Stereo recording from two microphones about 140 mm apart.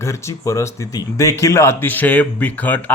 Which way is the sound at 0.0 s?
20° left (ahead or behind).